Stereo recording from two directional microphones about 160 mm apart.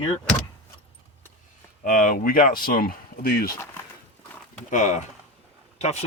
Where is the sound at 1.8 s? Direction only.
55° left (ahead or behind).